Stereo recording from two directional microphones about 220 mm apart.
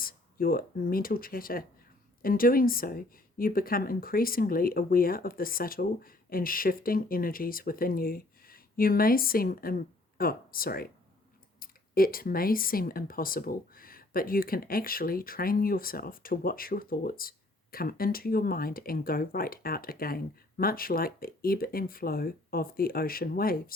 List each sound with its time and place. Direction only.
0.0 s speech: 40° left (ahead or behind)